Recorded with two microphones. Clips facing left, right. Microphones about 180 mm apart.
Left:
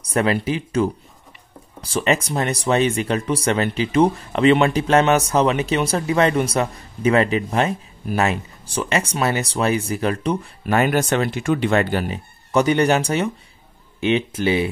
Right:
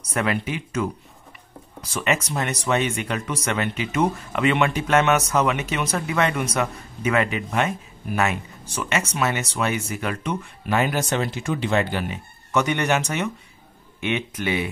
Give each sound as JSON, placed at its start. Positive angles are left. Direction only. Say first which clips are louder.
{"t": 0.1, "sound": "speech", "louder": "left 5 dB", "side_deg": 30}
{"t": 10.7, "sound": "speech", "louder": "left 4 dB", "side_deg": 55}